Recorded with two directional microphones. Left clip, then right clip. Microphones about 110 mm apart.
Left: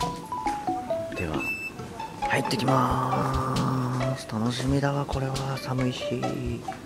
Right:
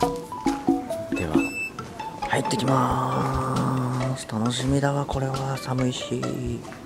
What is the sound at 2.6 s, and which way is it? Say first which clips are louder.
Music: right 1 dB; 10° right (ahead or behind).